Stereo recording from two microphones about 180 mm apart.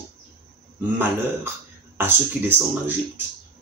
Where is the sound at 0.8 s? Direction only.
10° right (ahead or behind).